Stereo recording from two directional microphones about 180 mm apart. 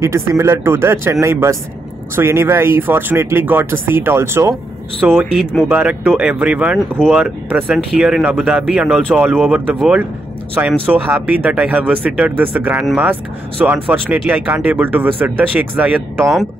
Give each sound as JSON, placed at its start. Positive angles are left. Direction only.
{"t": 0.0, "sound": "speech", "side_deg": -15}
{"t": 5.0, "sound": "speech", "side_deg": -5}